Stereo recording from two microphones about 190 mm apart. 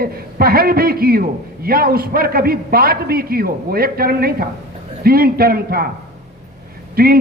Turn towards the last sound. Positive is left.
turn(degrees=-50)  # may be behind; listen again after turning